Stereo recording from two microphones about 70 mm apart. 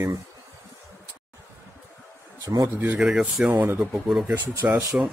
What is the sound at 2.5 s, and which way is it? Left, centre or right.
Speech, right.